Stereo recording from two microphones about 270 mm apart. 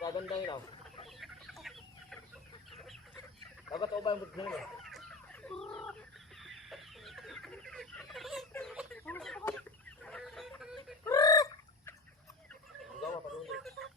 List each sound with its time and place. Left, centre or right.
0.0 s speech: centre
1.0 s chicken: centre
2.7 s fowl: centre
3.7 s speech: centre
4.4 s fowl: centre
6.4 s chicken: centre
11.0 s fowl: centre
13.5 s chicken: centre